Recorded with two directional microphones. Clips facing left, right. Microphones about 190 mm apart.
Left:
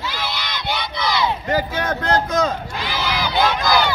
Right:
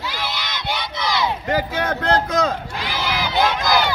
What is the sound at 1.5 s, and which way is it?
Speech, 60° right (ahead or behind).